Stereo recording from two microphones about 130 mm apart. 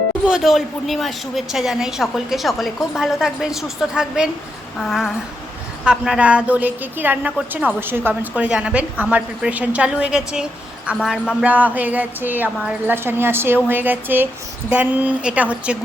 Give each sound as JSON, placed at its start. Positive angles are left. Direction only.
{"t": 0.3, "sound": "a woman's voice", "side_deg": -5}